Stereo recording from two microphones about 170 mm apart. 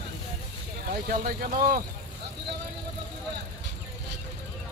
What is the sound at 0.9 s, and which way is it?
Speech, 55° right (ahead or behind).